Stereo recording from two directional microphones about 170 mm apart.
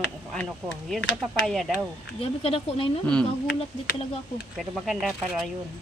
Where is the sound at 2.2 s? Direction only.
35° left (ahead or behind).